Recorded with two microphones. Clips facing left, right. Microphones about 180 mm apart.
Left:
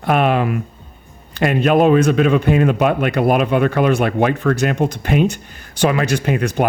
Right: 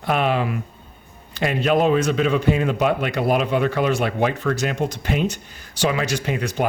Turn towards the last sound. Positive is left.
turn(degrees=55)  # may be behind; listen again after turning